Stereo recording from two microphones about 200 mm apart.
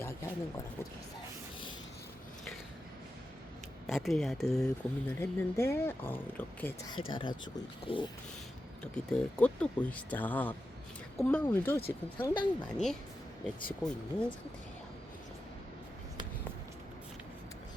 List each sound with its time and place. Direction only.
3.8 s speech: centre (ahead or behind)
7.1 s speech: 25° left (ahead or behind)
8.8 s speech: 5° left (ahead or behind)
12.3 s speech: 25° left (ahead or behind)
12.7 s speech: centre (ahead or behind)